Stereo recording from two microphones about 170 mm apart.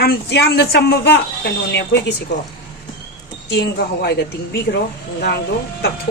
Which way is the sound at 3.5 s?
75° left (ahead or behind).